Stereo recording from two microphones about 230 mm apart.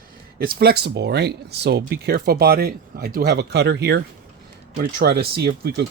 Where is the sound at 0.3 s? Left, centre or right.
Right.